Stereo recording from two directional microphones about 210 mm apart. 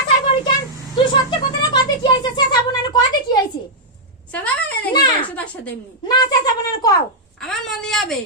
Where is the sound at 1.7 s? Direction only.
20° left (ahead or behind).